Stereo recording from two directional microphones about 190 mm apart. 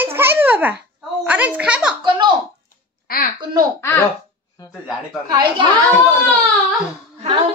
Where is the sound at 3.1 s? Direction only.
50° left (ahead or behind).